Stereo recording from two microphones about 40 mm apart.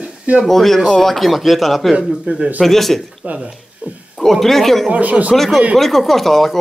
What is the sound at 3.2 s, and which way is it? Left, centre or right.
Speech, right.